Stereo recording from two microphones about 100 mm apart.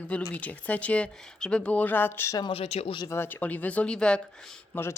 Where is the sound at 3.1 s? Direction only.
20° left (ahead or behind).